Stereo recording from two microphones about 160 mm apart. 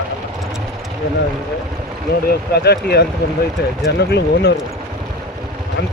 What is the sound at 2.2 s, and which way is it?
Speech, 85° left.